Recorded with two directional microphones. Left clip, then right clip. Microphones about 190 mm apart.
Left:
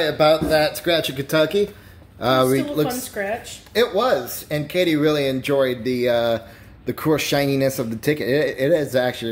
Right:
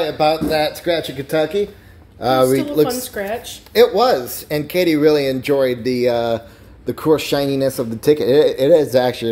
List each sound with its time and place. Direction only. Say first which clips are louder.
0.0 s speech: even; 20° left (ahead or behind)
0.5 s speech: right 1 dB; 10° left (ahead or behind)
2.5 s speech: right 5 dB; 25° right (ahead or behind); by 8.1 s centre (ahead or behind)
8.1 s speech: right 8 dB; 15° right (ahead or behind)